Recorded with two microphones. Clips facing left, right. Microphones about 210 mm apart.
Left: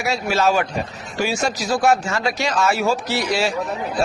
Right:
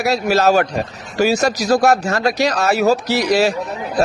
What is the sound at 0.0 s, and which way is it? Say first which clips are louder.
A man's voice: right 4 dB; 40° right (ahead or behind).